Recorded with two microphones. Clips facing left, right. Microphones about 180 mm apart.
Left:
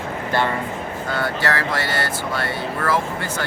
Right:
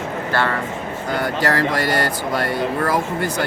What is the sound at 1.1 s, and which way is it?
Speech, 15° right (ahead or behind).